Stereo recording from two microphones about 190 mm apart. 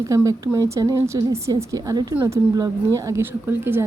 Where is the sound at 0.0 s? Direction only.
15° right (ahead or behind).